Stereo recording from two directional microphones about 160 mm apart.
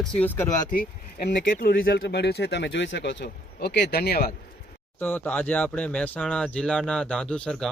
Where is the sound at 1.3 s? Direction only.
70° left (ahead or behind).